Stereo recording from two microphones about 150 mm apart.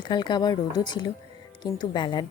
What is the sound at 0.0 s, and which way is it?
A woman's voice, 30° left (ahead or behind).